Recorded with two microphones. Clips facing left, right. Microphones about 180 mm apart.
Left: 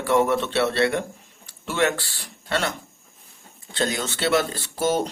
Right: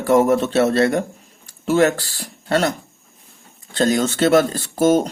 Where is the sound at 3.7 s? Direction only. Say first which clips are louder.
Right 8 dB; 45° right (ahead or behind).